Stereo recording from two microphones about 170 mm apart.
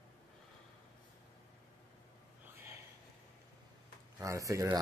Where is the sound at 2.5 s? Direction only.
15° right (ahead or behind).